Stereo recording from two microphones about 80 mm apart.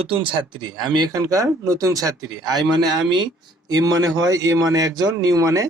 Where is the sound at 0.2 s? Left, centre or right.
Right.